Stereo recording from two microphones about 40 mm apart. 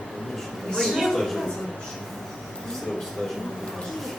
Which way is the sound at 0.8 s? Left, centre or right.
Centre.